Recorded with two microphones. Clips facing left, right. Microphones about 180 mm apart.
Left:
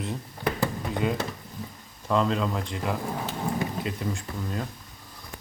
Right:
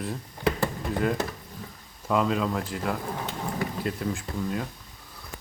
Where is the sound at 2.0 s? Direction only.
5° right (ahead or behind).